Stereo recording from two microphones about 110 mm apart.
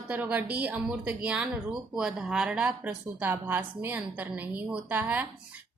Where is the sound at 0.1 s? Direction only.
15° right (ahead or behind).